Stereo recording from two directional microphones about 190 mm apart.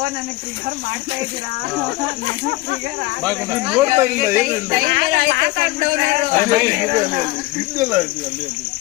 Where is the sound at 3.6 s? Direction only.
10° right (ahead or behind).